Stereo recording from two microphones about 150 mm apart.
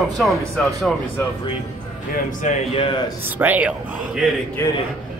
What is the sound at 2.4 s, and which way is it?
Speech, 40° left (ahead or behind).